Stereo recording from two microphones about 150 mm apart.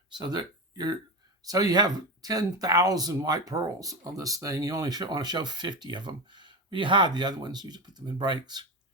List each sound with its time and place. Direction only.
0.1 s speech: 30° right (ahead or behind)